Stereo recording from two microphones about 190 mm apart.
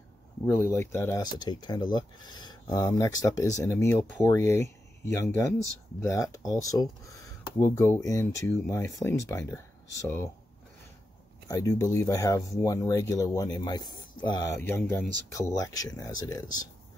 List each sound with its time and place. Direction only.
0.6 s speech: 10° left (ahead or behind)
11.4 s speech: 15° left (ahead or behind)